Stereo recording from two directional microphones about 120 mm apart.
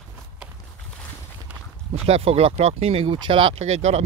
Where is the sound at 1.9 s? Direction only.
60° right (ahead or behind).